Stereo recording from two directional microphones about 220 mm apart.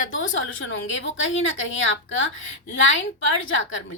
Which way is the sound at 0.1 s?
60° left (ahead or behind).